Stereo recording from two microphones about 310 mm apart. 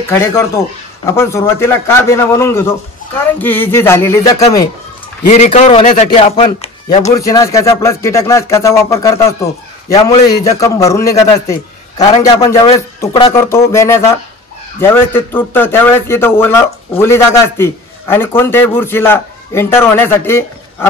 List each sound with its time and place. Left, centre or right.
0.1 s speech: centre
5.3 s a man's voice: left